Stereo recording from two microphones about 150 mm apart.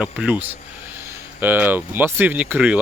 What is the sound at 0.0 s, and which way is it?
Speech, 10° right (ahead or behind).